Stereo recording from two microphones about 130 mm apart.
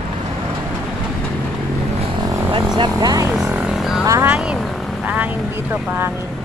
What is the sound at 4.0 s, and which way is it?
Vehicle, 25° right (ahead or behind).